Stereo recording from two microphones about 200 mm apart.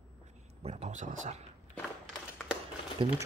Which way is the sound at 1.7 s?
5° left (ahead or behind).